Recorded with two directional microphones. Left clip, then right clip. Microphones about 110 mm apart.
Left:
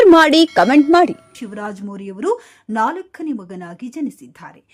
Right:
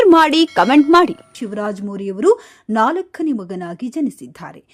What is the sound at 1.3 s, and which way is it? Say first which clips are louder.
Speech: right 5 dB; 30° right (ahead or behind).